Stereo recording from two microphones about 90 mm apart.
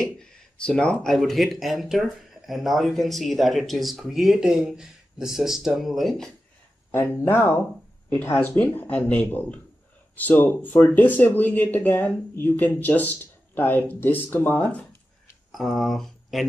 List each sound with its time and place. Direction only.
0.0 s speech: 5° left (ahead or behind)
1.1 s speech: centre (ahead or behind)
6.9 s speech: 25° left (ahead or behind)
15.5 s speech: centre (ahead or behind)